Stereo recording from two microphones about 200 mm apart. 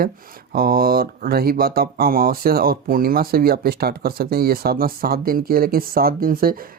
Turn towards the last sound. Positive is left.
turn(degrees=-45)  # may be behind; listen again after turning